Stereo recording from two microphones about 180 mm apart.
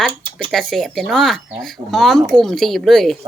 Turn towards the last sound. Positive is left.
turn(degrees=0)  # may be behind; listen again after turning